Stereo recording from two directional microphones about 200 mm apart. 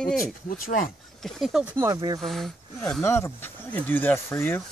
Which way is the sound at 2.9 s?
10° left (ahead or behind).